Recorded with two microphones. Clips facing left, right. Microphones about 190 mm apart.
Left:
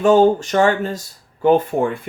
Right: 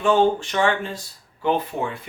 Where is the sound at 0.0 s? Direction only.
40° left (ahead or behind).